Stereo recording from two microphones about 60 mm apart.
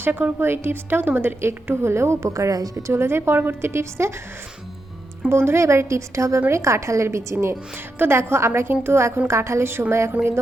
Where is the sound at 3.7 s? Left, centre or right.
Right.